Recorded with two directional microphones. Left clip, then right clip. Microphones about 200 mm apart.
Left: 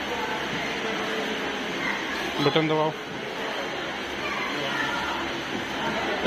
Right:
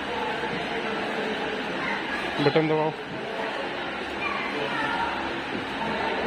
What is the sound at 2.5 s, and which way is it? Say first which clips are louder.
Speech: even; 10° right (ahead or behind).